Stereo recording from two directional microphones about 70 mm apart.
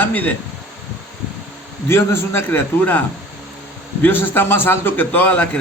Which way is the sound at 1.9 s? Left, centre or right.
Left.